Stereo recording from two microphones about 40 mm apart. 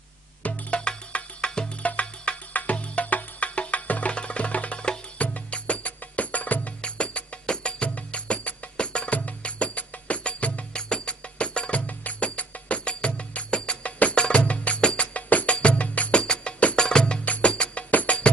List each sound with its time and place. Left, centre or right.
0.4 s music: left
0.8 s music: left
1.8 s music: left
4.1 s music: left
6.8 s music: left
10.8 s music: left
16.2 s music: left
16.7 s music: centre
17.2 s music: left